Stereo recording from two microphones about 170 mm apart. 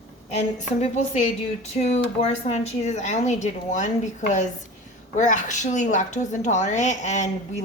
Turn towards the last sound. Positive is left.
turn(degrees=45)  # may be behind; listen again after turning